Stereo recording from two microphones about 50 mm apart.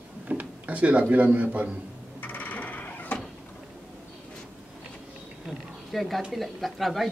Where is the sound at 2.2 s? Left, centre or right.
Left.